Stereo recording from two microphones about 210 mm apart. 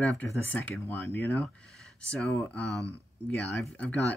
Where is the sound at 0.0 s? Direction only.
5° left (ahead or behind).